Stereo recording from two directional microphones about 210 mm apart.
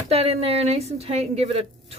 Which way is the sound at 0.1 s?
30° right (ahead or behind).